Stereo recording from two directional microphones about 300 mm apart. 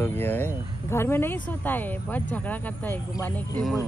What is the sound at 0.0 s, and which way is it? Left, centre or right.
Speech, centre.